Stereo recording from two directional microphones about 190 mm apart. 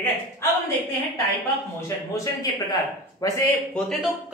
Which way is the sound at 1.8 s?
15° left (ahead or behind).